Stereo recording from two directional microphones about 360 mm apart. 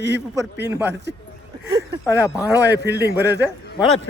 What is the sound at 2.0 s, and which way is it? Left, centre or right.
Speech, centre.